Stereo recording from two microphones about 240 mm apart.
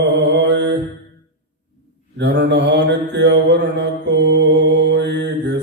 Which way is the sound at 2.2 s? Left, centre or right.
Right.